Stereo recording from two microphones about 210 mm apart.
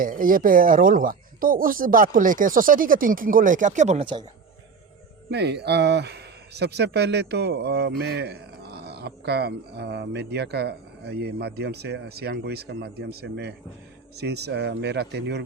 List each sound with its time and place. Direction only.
0.0 s speech: 40° right (ahead or behind); by 4.2 s 25° right (ahead or behind)
5.3 s speech: 50° right (ahead or behind)